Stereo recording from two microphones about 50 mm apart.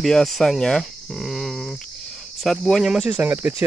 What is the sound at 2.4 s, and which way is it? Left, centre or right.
Cricket, centre.